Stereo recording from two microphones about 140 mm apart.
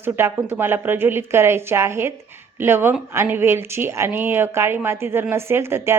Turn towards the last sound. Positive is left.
turn(degrees=-15)  # may be behind; listen again after turning